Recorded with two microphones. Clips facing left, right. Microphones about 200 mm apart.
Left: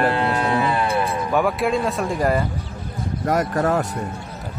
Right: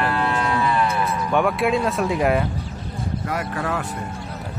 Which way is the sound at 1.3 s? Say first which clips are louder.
Even; centre (ahead or behind).